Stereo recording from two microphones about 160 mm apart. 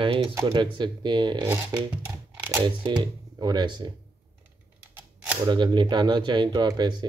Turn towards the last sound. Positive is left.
turn(degrees=-25)  # may be behind; listen again after turning